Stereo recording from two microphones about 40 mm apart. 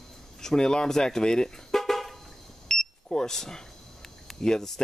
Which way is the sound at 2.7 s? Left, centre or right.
Centre.